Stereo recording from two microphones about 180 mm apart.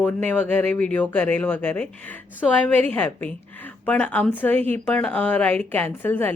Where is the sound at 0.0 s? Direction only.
10° left (ahead or behind).